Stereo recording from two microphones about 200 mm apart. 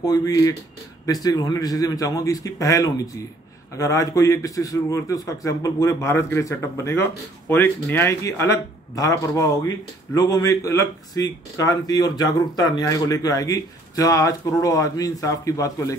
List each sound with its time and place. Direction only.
0.0 s a man's voice: 20° left (ahead or behind)